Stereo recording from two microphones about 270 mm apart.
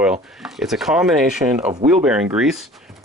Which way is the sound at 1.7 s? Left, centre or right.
Right.